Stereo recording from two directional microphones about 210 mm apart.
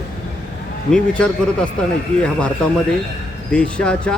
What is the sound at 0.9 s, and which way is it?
Speech, 5° left (ahead or behind).